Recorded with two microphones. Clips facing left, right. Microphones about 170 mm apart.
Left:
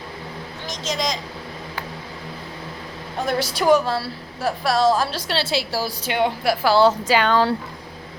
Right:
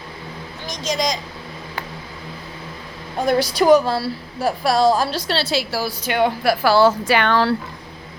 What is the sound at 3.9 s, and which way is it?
Speech, 10° right (ahead or behind).